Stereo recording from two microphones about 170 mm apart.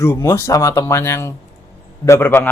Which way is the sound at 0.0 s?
15° left (ahead or behind).